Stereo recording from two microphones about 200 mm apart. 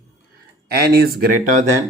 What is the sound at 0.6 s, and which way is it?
Speech, 50° right (ahead or behind).